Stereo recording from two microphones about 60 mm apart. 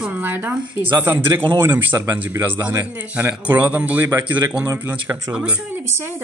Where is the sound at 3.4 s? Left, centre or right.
Right.